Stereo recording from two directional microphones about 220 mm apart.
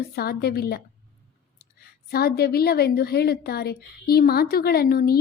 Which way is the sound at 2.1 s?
45° left (ahead or behind).